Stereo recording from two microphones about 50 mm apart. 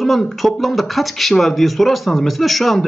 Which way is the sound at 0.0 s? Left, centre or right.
Centre.